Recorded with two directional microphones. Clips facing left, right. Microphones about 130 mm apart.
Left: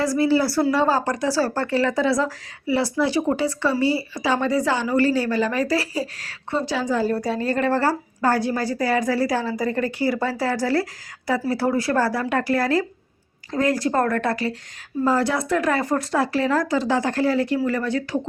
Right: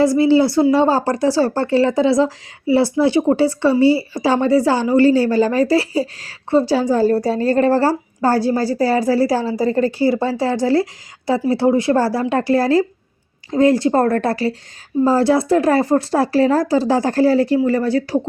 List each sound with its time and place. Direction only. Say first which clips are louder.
0.0 s speech: right 6 dB; 25° right (ahead or behind)